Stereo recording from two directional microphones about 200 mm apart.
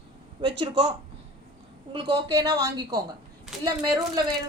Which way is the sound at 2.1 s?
20° right (ahead or behind).